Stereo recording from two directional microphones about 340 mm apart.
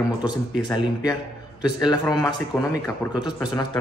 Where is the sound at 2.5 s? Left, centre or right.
Centre.